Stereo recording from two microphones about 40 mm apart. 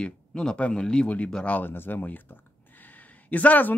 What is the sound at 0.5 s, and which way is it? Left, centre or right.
Speech, left.